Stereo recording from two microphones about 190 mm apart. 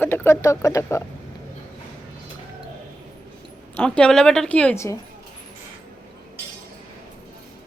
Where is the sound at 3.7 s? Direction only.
5° left (ahead or behind).